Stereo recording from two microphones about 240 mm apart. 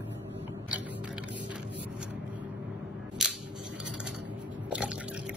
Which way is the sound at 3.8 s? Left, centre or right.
Centre.